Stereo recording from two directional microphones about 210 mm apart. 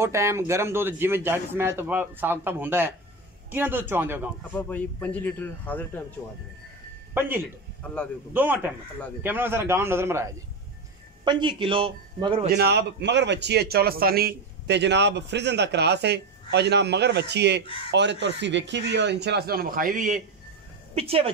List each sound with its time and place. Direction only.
0.0 s speech: 15° right (ahead or behind)
4.6 s a man's voice: 10° left (ahead or behind)
7.2 s speech: 10° right (ahead or behind)
7.8 s a man's voice: 5° left (ahead or behind)
8.3 s a man's voice: 10° right (ahead or behind); by 12.4 s 25° right (ahead or behind)
12.4 s a man's voice: 50° right (ahead or behind)
20.9 s a man's voice: 30° right (ahead or behind)